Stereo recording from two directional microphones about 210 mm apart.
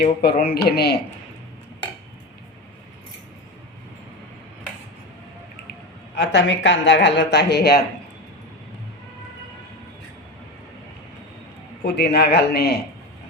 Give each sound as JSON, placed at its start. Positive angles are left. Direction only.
{"t": 0.0, "sound": "speech", "side_deg": 45}
{"t": 6.1, "sound": "speech", "side_deg": 60}
{"t": 11.9, "sound": "speech", "side_deg": 50}